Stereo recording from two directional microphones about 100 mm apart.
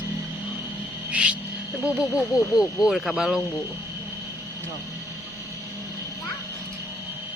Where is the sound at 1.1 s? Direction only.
10° right (ahead or behind).